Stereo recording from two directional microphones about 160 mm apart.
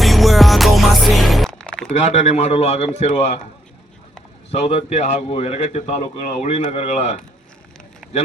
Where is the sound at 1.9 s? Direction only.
45° left (ahead or behind).